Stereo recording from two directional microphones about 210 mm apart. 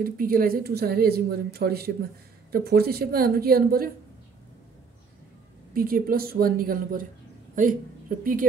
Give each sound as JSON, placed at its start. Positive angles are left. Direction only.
{"t": 0.0, "sound": "speech", "side_deg": -45}
{"t": 5.7, "sound": "a woman's voice", "side_deg": -45}